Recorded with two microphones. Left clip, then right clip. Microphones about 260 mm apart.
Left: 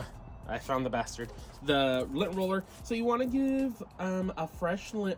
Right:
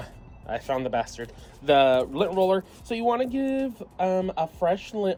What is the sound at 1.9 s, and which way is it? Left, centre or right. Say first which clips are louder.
Speech: right 8 dB; centre.